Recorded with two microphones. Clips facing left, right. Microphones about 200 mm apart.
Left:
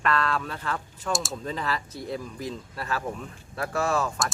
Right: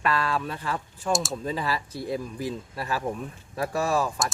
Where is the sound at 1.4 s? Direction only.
10° right (ahead or behind).